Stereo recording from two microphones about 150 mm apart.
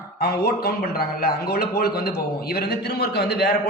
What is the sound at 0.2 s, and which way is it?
A man's voice, 90° left.